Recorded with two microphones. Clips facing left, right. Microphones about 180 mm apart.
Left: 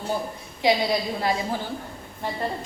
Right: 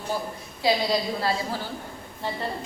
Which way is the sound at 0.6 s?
20° left (ahead or behind).